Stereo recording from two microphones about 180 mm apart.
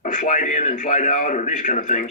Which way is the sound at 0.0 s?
45° left (ahead or behind).